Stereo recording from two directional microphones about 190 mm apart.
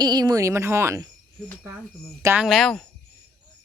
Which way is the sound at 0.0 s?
20° right (ahead or behind).